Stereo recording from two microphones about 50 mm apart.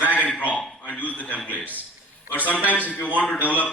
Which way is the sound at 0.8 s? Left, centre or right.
Left.